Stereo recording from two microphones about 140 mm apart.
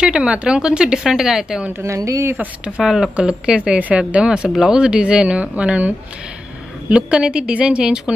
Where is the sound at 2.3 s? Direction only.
5° right (ahead or behind).